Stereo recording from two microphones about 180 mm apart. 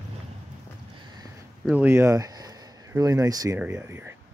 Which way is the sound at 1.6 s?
10° right (ahead or behind).